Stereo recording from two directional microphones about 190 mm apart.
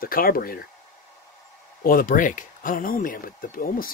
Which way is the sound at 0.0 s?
50° left (ahead or behind).